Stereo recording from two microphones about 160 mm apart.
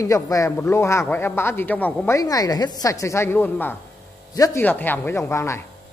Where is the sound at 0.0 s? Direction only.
20° left (ahead or behind).